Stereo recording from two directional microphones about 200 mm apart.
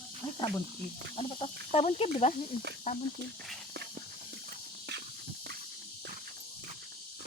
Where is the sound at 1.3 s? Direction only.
30° left (ahead or behind).